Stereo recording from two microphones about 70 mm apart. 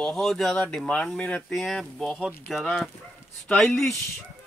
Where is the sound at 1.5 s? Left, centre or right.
Centre.